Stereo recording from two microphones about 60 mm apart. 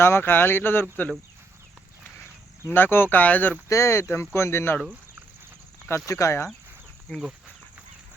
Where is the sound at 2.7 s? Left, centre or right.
Left.